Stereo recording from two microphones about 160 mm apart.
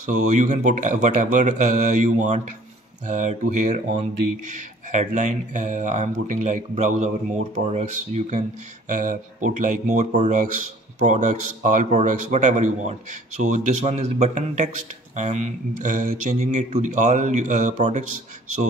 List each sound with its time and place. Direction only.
0.0 s speech: 50° right (ahead or behind)